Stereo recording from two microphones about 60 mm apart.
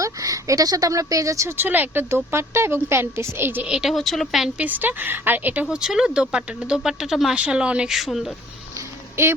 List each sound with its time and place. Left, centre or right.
0.0 s speech: right
1.5 s speech: right
3.7 s speech: centre
3.9 s speech: centre
4.5 s speech: right
5.7 s speech: centre
7.3 s speech: centre
7.9 s speech: centre
9.2 s speech: right